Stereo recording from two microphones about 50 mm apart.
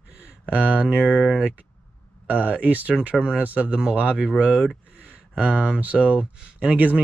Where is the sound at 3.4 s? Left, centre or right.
Right.